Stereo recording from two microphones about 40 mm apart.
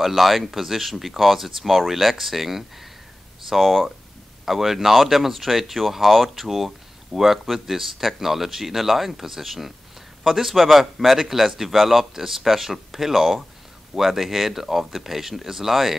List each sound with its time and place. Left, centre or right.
0.0 s speech: centre